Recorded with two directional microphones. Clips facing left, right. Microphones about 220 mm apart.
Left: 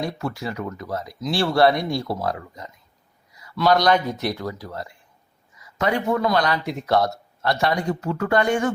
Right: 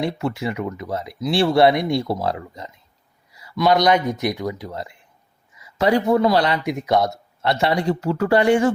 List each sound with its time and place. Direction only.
0.0 s speech: 25° right (ahead or behind)
5.7 s a man's voice: 30° right (ahead or behind)
6.7 s speech: 15° right (ahead or behind)